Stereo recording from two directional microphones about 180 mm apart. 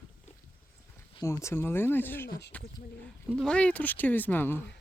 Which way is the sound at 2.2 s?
55° left (ahead or behind).